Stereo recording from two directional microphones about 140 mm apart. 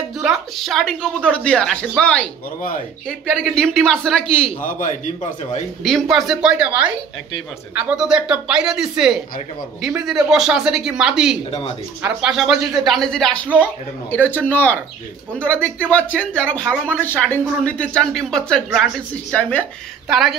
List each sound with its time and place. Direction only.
0.2 s speech: centre (ahead or behind)
4.6 s a man's voice: 65° left (ahead or behind)
5.9 s speech: centre (ahead or behind)
20.1 s speech: centre (ahead or behind)